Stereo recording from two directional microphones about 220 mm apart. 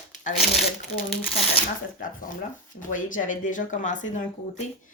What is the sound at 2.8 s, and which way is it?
Speech, 35° left (ahead or behind).